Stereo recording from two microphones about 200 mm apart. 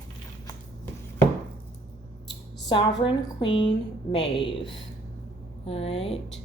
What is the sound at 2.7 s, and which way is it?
A woman's voice, 25° left (ahead or behind).